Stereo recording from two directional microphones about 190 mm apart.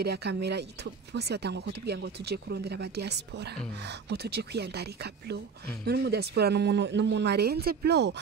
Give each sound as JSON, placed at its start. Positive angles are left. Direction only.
{"t": 0.0, "sound": "speech", "side_deg": -60}